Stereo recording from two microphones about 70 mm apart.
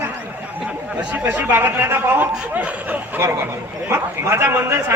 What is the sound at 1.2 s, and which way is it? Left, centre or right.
A man's voice, right.